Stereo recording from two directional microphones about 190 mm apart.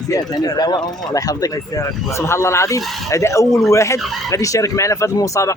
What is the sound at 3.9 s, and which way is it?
Speech, centre (ahead or behind).